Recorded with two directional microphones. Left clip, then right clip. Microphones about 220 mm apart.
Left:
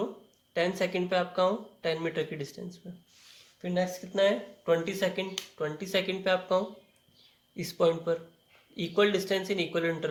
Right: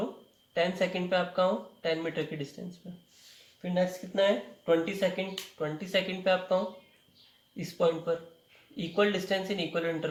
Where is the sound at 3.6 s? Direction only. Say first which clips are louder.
Right 1 dB; 45° left (ahead or behind).